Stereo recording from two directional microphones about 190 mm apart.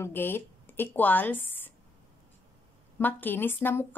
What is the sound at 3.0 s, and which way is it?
Speech, 10° left (ahead or behind).